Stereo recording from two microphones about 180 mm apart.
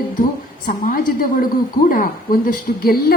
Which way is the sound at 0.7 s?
50° left (ahead or behind).